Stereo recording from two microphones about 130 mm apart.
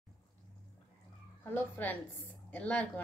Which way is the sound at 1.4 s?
15° left (ahead or behind).